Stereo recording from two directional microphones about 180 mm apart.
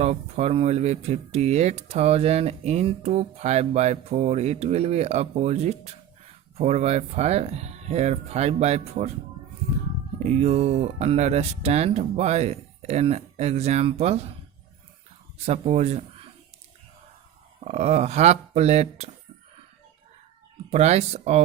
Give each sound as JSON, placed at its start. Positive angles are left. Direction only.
{"t": 0.0, "sound": "speech", "side_deg": -35}
{"t": 10.2, "sound": "speech", "side_deg": -35}
{"t": 15.4, "sound": "speech", "side_deg": -35}
{"t": 17.6, "sound": "speech", "side_deg": -35}
{"t": 20.7, "sound": "speech", "side_deg": -35}